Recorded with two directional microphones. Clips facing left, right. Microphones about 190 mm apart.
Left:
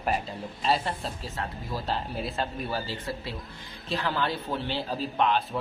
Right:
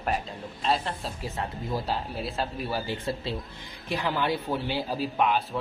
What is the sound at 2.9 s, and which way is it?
Speech, 25° right (ahead or behind).